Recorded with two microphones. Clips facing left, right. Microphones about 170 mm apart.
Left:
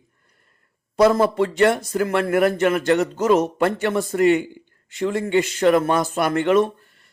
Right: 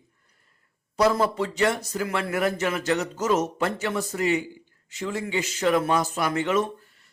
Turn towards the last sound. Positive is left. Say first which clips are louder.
# left 6 dB
turn(degrees=55)  # may be behind; listen again after turning